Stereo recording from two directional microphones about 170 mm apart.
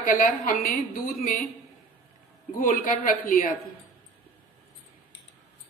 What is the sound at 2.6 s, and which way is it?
Speech, 55° left (ahead or behind).